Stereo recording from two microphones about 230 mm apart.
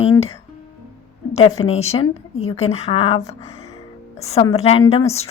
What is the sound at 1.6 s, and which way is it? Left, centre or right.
Speech, left.